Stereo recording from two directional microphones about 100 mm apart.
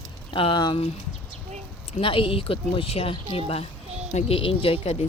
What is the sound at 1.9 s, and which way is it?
Speech, 65° left (ahead or behind).